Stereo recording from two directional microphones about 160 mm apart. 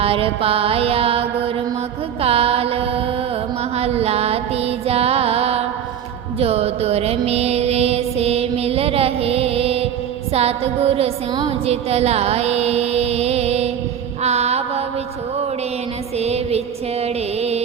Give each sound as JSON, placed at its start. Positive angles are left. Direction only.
{"t": 0.0, "sound": "mantra", "side_deg": -35}
{"t": 3.8, "sound": "music", "side_deg": -40}
{"t": 6.4, "sound": "mantra", "side_deg": -40}
{"t": 10.3, "sound": "a sound", "side_deg": -40}
{"t": 14.2, "sound": "mantra", "side_deg": -40}
{"t": 16.1, "sound": "music", "side_deg": -40}